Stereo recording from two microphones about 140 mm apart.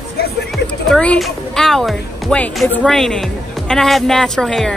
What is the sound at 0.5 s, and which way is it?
Speech, 5° left (ahead or behind).